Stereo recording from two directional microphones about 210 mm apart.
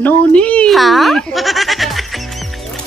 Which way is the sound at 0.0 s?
5° left (ahead or behind).